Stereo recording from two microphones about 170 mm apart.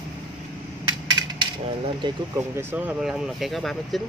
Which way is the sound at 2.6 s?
10° right (ahead or behind).